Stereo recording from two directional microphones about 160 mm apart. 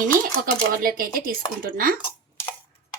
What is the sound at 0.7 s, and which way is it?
A woman's voice, 65° right (ahead or behind).